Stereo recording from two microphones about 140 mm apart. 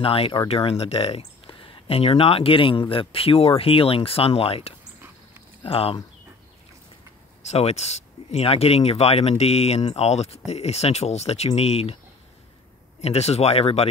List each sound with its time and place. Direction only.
0.0 s speech: 40° left (ahead or behind)
7.5 s speech: 50° left (ahead or behind)
13.0 s speech: 50° left (ahead or behind)